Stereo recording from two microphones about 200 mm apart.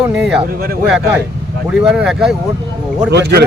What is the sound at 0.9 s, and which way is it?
A man's voice, 5° right (ahead or behind).